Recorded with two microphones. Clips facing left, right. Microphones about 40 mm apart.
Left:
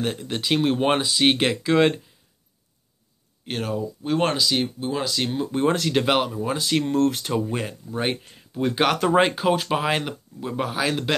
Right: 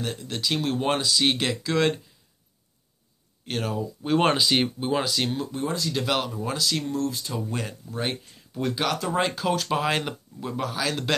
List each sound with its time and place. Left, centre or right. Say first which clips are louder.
0.0 s speech: left 3 dB; left
3.4 s speech: left 2 dB; centre
4.4 s speech: even; right
5.0 s speech: left 2 dB; centre
5.5 s speech: left 7 dB; left
6.0 s speech: left 5 dB; left
6.8 s speech: left 7 dB; left
7.5 s speech: left 3 dB; centre
8.2 s a sound: left 3 dB; left
8.7 s speech: left 8 dB; left; by 10.5 s centre
10.5 s speech: left 3 dB; left